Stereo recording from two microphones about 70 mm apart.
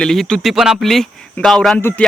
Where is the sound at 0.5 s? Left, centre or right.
Centre.